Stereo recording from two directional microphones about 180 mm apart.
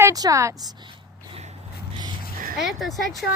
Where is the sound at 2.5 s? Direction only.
Centre (ahead or behind).